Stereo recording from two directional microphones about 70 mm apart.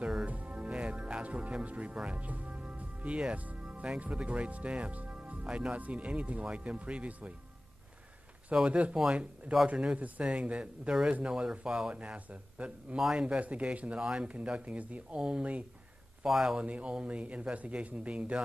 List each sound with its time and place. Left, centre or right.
0.3 s music: right
2.0 s speech: centre
8.5 s a man's voice: centre
16.6 s speech: centre